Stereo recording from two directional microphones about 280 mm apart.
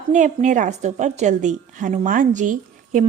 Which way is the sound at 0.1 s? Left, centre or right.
Right.